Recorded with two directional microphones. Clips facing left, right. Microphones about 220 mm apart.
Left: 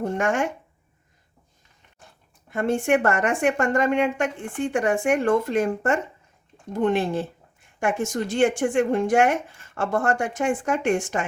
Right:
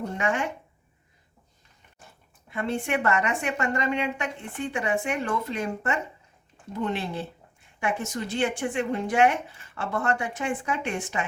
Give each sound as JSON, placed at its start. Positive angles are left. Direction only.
{"t": 0.0, "sound": "a woman's voice", "side_deg": 45}
{"t": 2.5, "sound": "a woman's voice", "side_deg": 45}